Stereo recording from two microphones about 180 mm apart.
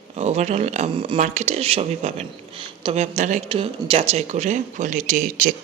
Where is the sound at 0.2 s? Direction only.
40° right (ahead or behind).